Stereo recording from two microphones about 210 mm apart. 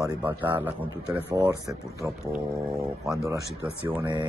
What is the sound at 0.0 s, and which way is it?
Speech, 10° right (ahead or behind).